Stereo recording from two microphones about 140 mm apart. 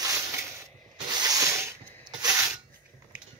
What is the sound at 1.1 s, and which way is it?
Sanding, 25° right (ahead or behind).